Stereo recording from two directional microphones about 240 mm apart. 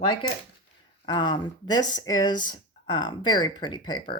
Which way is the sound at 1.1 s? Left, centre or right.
Centre.